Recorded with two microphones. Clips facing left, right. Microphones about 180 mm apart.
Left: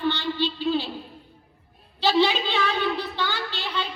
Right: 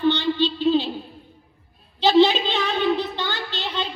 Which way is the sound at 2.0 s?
20° right (ahead or behind).